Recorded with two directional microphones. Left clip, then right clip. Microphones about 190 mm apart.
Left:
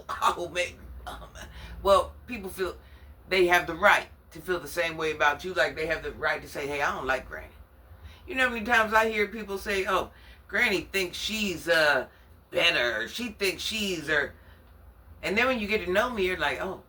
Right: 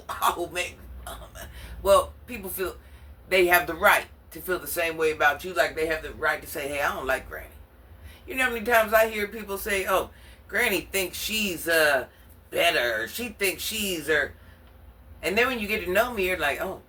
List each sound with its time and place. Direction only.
0.2 s a sound: 10° left (ahead or behind)
3.2 s speech: 5° left (ahead or behind)
15.2 s speech: 10° left (ahead or behind)